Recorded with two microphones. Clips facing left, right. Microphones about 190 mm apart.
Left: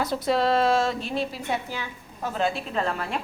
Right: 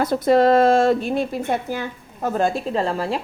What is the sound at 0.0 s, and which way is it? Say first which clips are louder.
A woman's voice: right 8 dB; 50° right (ahead or behind).